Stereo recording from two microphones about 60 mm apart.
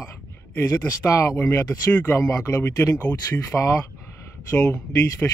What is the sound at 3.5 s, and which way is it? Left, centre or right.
Speech, centre.